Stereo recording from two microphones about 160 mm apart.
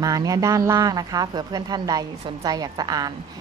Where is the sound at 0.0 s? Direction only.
20° right (ahead or behind).